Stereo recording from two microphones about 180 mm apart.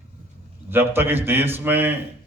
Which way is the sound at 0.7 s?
10° right (ahead or behind).